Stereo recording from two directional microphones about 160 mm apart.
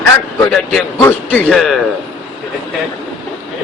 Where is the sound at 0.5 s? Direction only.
Centre (ahead or behind).